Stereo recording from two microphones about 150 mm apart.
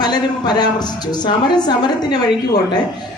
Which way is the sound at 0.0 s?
30° left (ahead or behind).